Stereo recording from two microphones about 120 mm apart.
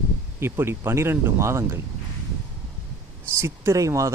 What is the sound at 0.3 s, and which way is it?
Speech, 20° right (ahead or behind).